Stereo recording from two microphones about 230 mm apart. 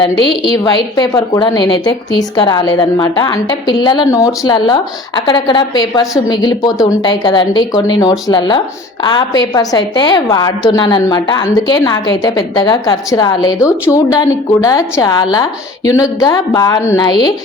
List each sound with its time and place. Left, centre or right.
0.4 s a woman's voice: centre